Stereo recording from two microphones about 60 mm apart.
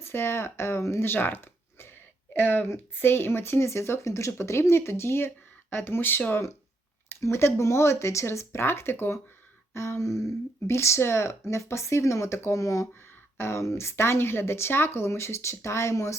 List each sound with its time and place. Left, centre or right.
0.0 s speech: left
1.1 s a sound: left
2.7 s speech: left
13.3 s speech: left